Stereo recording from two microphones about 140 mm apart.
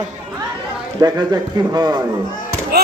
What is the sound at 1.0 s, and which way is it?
Speech, 30° right (ahead or behind).